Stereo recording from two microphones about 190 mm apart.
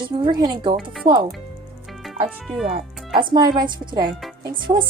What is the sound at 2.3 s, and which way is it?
Speech, centre (ahead or behind).